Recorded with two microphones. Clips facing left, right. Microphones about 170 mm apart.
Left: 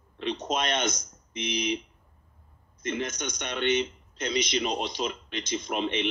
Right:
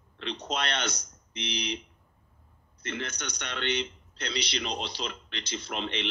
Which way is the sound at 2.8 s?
20° left (ahead or behind).